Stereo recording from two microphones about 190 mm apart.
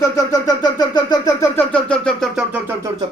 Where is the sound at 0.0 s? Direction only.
20° left (ahead or behind).